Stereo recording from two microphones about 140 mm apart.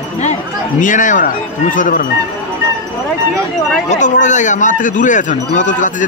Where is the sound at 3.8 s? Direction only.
60° left (ahead or behind).